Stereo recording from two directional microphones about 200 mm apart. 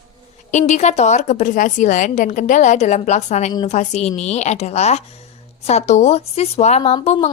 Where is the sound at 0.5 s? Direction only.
35° left (ahead or behind).